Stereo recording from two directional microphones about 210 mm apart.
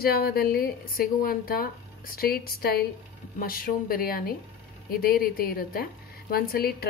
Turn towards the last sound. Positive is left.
turn(degrees=45)  # may be behind; listen again after turning